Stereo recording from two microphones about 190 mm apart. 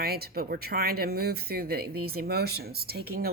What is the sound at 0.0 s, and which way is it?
Speech, 55° right (ahead or behind).